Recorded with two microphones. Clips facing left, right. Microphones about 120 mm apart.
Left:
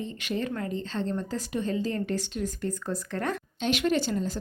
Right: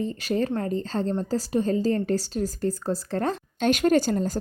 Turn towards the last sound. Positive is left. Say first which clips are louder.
# right 5 dB
turn(degrees=-45)  # may be behind; listen again after turning